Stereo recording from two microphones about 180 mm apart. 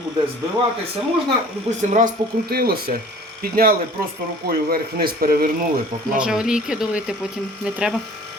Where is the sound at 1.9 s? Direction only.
55° right (ahead or behind).